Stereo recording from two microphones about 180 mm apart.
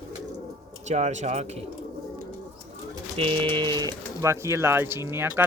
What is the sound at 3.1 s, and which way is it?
Pigeon, 30° right (ahead or behind).